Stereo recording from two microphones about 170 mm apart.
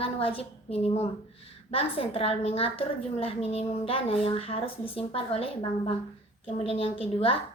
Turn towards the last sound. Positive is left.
turn(degrees=35)  # may be behind; listen again after turning